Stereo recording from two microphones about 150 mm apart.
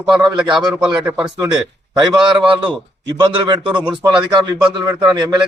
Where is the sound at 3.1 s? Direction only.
30° right (ahead or behind).